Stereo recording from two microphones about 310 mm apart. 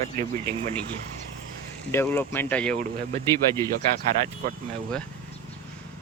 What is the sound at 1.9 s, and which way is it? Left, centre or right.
Speech, centre.